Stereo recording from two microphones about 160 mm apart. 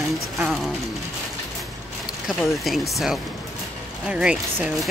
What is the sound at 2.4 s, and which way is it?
Speech, centre (ahead or behind).